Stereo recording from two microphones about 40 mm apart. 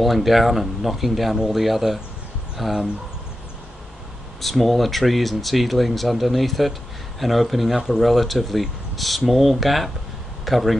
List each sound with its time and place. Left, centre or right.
0.0 s speech: centre
4.4 s speech: centre